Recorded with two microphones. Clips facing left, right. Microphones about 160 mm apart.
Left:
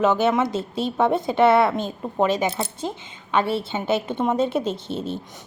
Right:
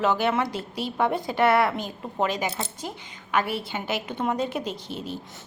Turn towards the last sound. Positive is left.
turn(degrees=25)  # may be behind; listen again after turning